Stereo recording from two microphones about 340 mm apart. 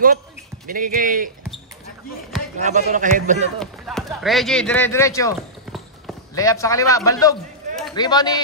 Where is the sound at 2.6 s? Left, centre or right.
Right.